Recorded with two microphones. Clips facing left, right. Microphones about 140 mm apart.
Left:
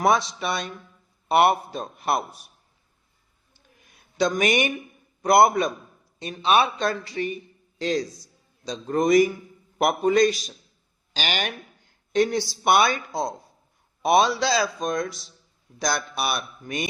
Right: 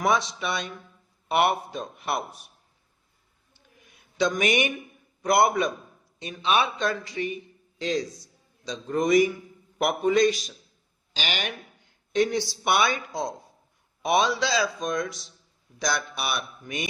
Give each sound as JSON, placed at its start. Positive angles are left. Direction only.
{"t": 0.0, "sound": "speech", "side_deg": 40}
{"t": 4.2, "sound": "a man's voice", "side_deg": 40}
{"t": 14.0, "sound": "speech", "side_deg": 35}